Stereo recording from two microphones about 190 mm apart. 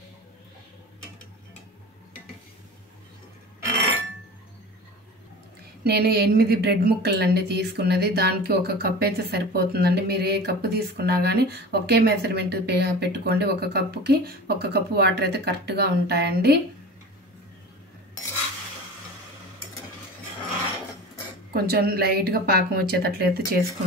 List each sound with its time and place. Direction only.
5.9 s a woman's voice: 55° right (ahead or behind)
21.5 s a woman's voice: 55° right (ahead or behind)